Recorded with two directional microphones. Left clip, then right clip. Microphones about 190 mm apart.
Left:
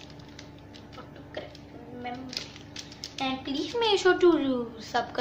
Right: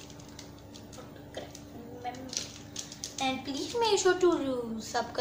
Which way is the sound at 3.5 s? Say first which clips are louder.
Left 3 dB; centre (ahead or behind).